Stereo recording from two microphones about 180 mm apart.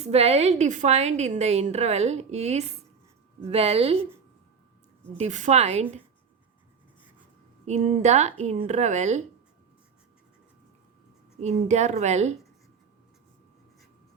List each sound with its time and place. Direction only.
0.0 s a woman's voice: 35° right (ahead or behind)
5.1 s a woman's voice: 40° right (ahead or behind)
7.6 s a woman's voice: 40° right (ahead or behind)
11.3 s a woman's voice: 40° right (ahead or behind)